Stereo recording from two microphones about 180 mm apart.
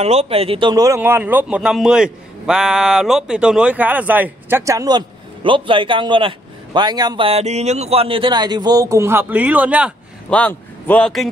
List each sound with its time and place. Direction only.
0.0 s speech: 35° right (ahead or behind); by 9.9 s 5° right (ahead or behind)
10.3 s a man's voice: 10° left (ahead or behind)